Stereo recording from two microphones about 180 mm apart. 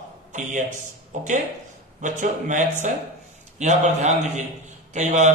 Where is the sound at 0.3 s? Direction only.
45° right (ahead or behind).